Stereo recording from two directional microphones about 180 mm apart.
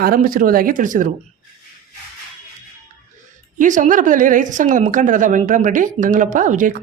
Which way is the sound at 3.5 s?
45° right (ahead or behind).